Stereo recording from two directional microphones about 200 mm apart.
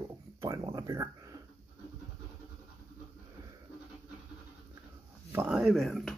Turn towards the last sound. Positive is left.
turn(degrees=0)  # may be behind; listen again after turning